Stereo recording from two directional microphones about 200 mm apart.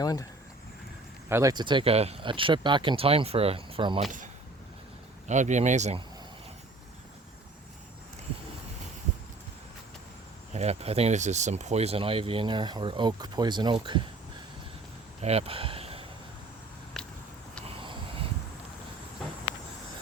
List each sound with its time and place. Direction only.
0.0 s speech: 15° left (ahead or behind)
1.3 s speech: 15° right (ahead or behind)
5.3 s speech: 35° right (ahead or behind)
10.5 s speech: 35° right (ahead or behind)
15.2 s a sound: 30° right (ahead or behind)
17.7 s a sound: 25° right (ahead or behind)